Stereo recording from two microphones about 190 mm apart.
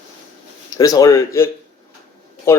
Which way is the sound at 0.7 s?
20° left (ahead or behind).